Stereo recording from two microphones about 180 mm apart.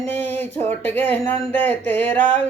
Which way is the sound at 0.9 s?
10° left (ahead or behind).